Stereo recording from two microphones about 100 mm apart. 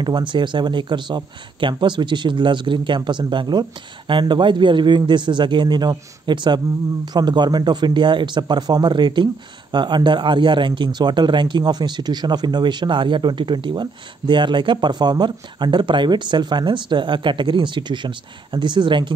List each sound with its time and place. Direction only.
0.0 s speech: 50° right (ahead or behind)